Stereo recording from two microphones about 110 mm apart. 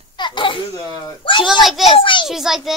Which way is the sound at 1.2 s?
50° left (ahead or behind).